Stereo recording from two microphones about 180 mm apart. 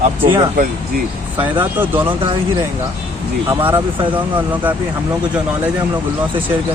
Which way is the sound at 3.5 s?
20° right (ahead or behind).